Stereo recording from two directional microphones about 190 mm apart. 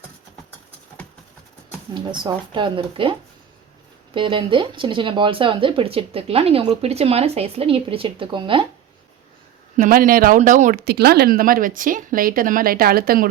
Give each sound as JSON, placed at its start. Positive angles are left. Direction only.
{"t": 1.9, "sound": "speech", "side_deg": -25}
{"t": 9.7, "sound": "speech", "side_deg": -45}